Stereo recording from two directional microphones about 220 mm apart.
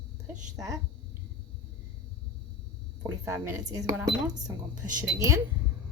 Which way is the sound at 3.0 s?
10° right (ahead or behind).